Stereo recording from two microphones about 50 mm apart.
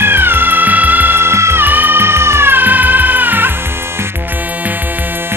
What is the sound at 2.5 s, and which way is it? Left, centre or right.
Music, right.